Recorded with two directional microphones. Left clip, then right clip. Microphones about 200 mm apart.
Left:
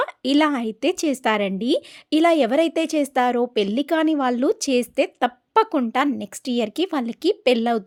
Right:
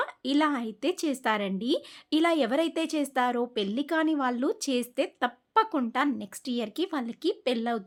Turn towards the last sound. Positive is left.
turn(degrees=30)  # may be behind; listen again after turning